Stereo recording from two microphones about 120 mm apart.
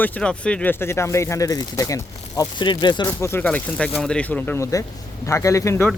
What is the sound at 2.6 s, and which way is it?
Speech, 40° left (ahead or behind).